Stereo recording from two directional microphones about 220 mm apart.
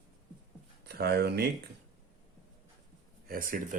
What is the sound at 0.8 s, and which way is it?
Speech, 45° right (ahead or behind).